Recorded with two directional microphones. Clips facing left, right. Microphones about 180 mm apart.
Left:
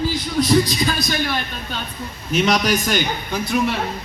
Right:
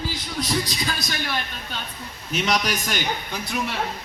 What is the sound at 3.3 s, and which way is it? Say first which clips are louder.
Speech: left 8 dB; 65° left (ahead or behind).